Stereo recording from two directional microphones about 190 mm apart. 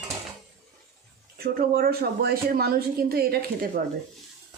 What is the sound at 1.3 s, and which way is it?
Speech, 50° right (ahead or behind).